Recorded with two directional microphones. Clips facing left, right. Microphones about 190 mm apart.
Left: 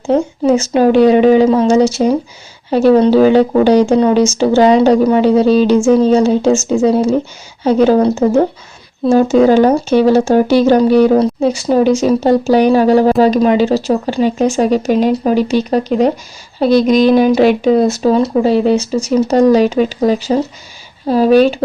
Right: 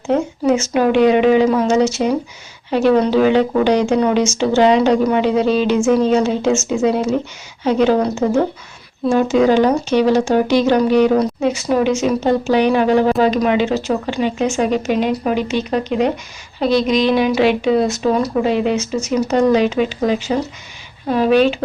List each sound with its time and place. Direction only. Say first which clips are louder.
0.1 s a woman's voice: left 4 dB; 35° left (ahead or behind)
9.3 s a woman's voice: left 3 dB; 45° left (ahead or behind)